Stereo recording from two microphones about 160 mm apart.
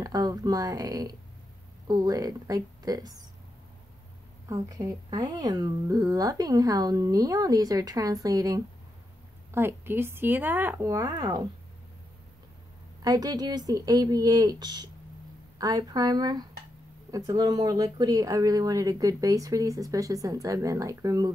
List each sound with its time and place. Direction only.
0.0 s speech: 25° right (ahead or behind)
4.5 s speech: 20° right (ahead or behind)
13.0 s speech: 25° right (ahead or behind)